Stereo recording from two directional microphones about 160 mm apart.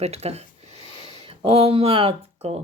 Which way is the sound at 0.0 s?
40° right (ahead or behind).